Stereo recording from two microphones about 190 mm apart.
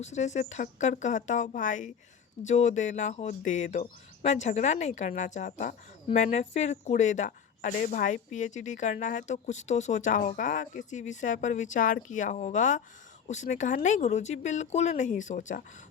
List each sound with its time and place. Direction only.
0.0 s speech: 35° left (ahead or behind)